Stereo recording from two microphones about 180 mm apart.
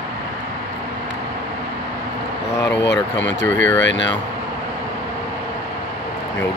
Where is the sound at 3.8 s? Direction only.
90° left.